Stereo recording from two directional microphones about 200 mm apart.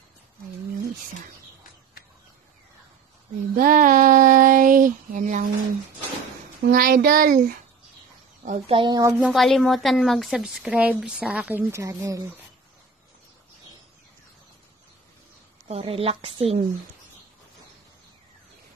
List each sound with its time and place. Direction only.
3.5 s female singing: 45° right (ahead or behind)
6.6 s speech: 50° right (ahead or behind)
8.5 s a woman's voice: 25° right (ahead or behind)
9.2 s a woman's voice: centre (ahead or behind); by 12.3 s 15° right (ahead or behind)
15.7 s a woman's voice: 30° right (ahead or behind)